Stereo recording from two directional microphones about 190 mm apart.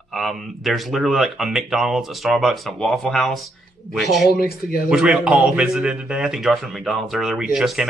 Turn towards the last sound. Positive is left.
turn(degrees=0)  # may be behind; listen again after turning